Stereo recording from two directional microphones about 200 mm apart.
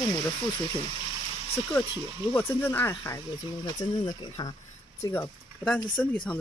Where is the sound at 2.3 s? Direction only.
10° left (ahead or behind).